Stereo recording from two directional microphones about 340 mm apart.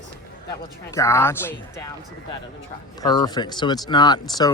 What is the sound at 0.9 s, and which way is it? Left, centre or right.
Speech, centre.